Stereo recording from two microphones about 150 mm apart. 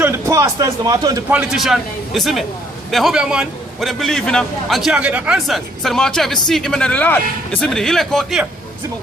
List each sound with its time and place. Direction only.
0.0 s a man's voice: 20° right (ahead or behind)
1.3 s a man's voice: 5° right (ahead or behind)